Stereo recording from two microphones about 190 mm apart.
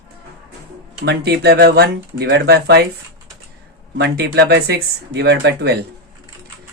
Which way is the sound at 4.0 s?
60° right (ahead or behind).